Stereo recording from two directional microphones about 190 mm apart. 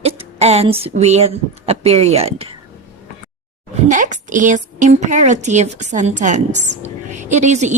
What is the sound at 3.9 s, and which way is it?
Speech, 40° right (ahead or behind).